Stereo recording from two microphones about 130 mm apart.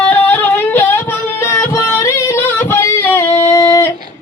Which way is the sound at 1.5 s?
20° left (ahead or behind).